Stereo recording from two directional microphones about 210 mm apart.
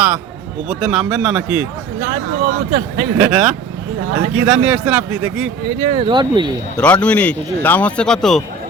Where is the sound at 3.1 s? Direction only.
5° right (ahead or behind).